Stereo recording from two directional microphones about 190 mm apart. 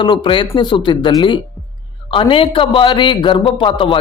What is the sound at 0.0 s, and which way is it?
A man's voice, 25° left (ahead or behind).